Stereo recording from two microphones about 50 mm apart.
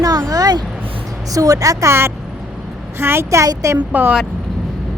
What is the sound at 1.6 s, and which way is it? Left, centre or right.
Speech, right.